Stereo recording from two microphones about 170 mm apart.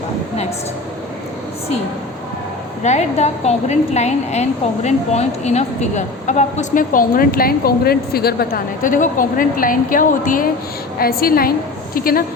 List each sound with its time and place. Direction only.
2.8 s a woman's voice: 40° left (ahead or behind); by 12.2 s 60° left (ahead or behind)